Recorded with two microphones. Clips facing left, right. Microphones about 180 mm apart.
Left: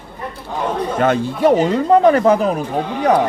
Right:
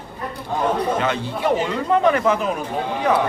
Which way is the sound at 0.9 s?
45° left (ahead or behind).